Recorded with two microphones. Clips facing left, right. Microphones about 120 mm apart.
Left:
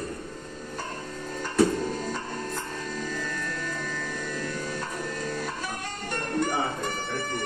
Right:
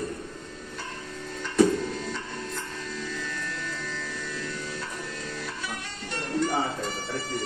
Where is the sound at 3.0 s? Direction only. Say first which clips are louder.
Left 2 dB; 45° left (ahead or behind).